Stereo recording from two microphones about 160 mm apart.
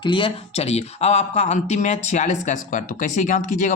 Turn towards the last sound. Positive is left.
turn(degrees=50)  # may be behind; listen again after turning